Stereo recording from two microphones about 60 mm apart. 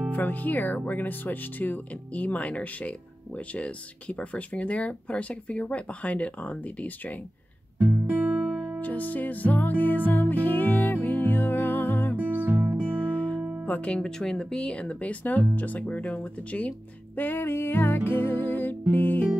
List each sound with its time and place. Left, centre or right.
0.1 s speech: left
7.8 s music: right
8.8 s music: left
12.4 s music: right
12.9 s music: left
13.4 s music: centre
13.7 s speech: centre
17.2 s music: left